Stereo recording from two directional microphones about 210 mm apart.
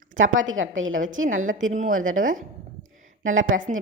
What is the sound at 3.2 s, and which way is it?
Speech, 70° right (ahead or behind).